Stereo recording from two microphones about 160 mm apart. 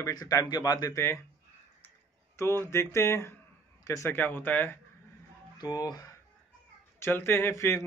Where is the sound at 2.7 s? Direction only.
15° left (ahead or behind).